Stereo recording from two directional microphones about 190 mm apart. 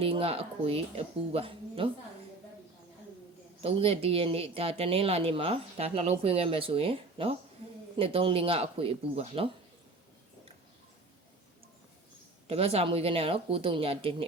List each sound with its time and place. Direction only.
0.0 s speech: 30° right (ahead or behind)
3.6 s speech: 30° right (ahead or behind)
12.5 s speech: 30° right (ahead or behind)